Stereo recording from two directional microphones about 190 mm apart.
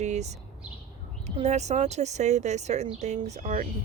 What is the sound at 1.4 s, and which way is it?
Speech, 35° right (ahead or behind).